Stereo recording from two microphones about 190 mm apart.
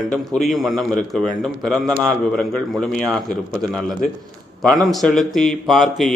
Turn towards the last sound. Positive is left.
turn(degrees=0)  # may be behind; listen again after turning